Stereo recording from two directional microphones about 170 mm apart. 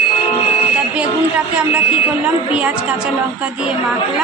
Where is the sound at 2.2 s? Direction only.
5° right (ahead or behind).